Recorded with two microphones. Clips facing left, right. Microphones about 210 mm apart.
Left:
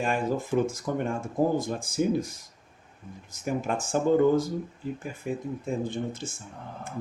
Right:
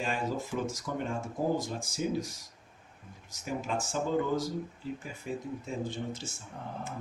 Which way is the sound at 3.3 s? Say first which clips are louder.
Left 5 dB; 55° left (ahead or behind).